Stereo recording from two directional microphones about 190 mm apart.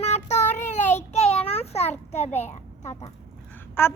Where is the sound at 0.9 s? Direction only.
35° left (ahead or behind).